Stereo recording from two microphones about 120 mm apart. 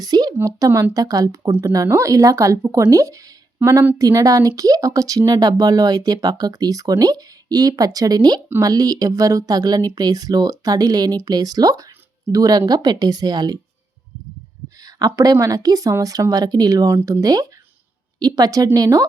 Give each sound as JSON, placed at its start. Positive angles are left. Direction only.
{"t": 0.0, "sound": "speech", "side_deg": -35}
{"t": 1.5, "sound": "speech", "side_deg": -15}
{"t": 14.8, "sound": "speech", "side_deg": -35}